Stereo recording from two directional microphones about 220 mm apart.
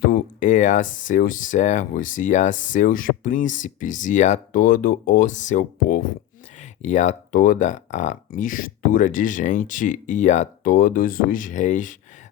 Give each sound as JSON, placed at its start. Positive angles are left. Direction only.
{"t": 0.0, "sound": "speech", "side_deg": 40}